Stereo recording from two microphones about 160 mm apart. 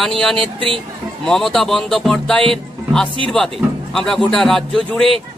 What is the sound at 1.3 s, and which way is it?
Speech, centre (ahead or behind).